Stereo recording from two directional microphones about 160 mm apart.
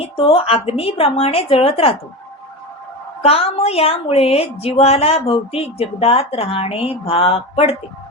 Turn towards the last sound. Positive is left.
turn(degrees=35)  # may be behind; listen again after turning